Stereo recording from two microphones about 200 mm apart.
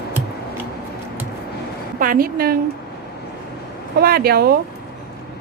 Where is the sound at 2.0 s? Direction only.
45° right (ahead or behind).